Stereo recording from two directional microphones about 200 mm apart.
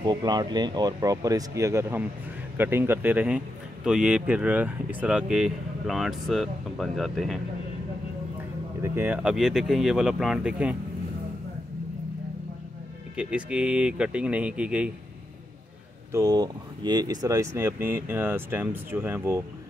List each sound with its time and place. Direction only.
0.0 s a man's voice: 20° right (ahead or behind); by 7.3 s centre (ahead or behind)
8.8 s a man's voice: 10° right (ahead or behind)
13.1 s a man's voice: 5° right (ahead or behind)
16.1 s speech: 15° right (ahead or behind)